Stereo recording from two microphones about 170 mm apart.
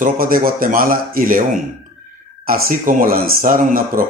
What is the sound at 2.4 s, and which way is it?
Speech, 60° right (ahead or behind).